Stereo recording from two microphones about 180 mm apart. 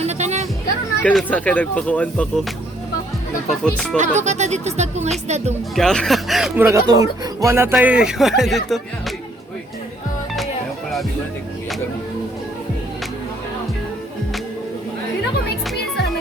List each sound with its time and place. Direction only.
0.0 s music: 40° right (ahead or behind)
1.0 s speech: 5° left (ahead or behind)
3.5 s speech: 5° left (ahead or behind)
3.9 s speech: 40° right (ahead or behind)
5.7 s speech: 5° left (ahead or behind)
6.7 s speech: 15° right (ahead or behind); by 9.1 s centre (ahead or behind)